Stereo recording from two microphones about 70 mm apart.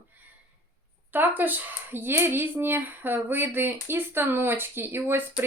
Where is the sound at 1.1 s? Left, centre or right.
Right.